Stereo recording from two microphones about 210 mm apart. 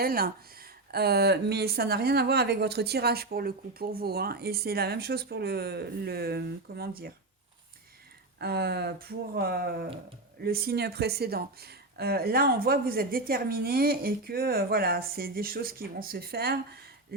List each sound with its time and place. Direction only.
0.0 s speech: 45° right (ahead or behind)
8.4 s speech: 50° right (ahead or behind)
17.1 s a sound: 45° right (ahead or behind)